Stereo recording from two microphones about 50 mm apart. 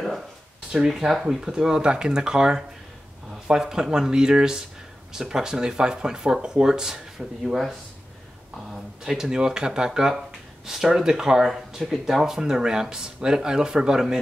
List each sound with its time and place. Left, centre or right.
0.7 s speech: centre
8.7 s speech: centre